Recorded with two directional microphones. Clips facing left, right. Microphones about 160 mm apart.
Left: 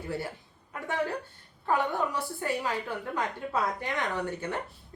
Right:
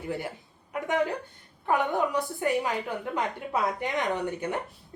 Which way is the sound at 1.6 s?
15° right (ahead or behind).